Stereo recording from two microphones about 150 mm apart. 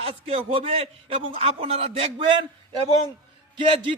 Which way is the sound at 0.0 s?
40° right (ahead or behind).